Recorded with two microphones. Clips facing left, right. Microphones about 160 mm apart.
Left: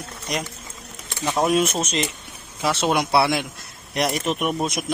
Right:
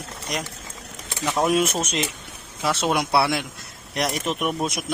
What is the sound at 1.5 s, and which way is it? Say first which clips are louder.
Speech: left 1 dB; 5° right (ahead or behind).